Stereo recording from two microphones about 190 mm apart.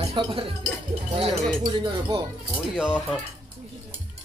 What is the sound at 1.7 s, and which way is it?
Music, 25° right (ahead or behind).